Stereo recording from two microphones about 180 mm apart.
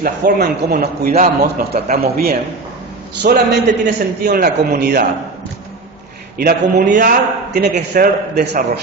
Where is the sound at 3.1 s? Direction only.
70° right (ahead or behind).